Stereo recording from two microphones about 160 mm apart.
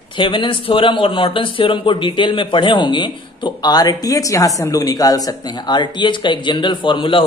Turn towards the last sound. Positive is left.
turn(degrees=30)  # may be behind; listen again after turning